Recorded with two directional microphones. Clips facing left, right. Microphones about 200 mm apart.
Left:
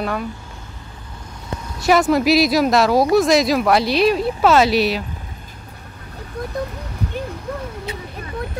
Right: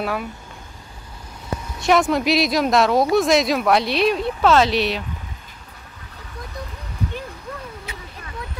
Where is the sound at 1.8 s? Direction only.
5° left (ahead or behind).